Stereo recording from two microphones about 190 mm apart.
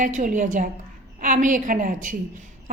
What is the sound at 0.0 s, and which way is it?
A woman's voice, 40° right (ahead or behind).